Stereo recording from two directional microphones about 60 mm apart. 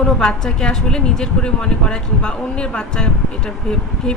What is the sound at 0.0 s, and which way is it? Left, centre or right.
Speech, centre.